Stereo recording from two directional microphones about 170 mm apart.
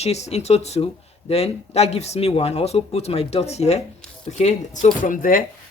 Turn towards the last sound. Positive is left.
turn(degrees=55)  # may be behind; listen again after turning